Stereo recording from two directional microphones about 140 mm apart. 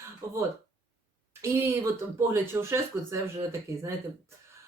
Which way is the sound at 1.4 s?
20° right (ahead or behind).